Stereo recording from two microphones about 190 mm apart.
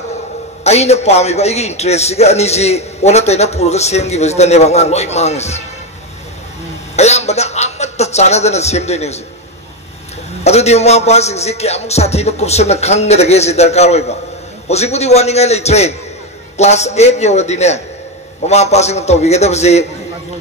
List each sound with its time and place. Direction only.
0.7 s a man's voice: 35° left (ahead or behind)
7.0 s a man's voice: 35° left (ahead or behind)
10.4 s a man's voice: 35° left (ahead or behind)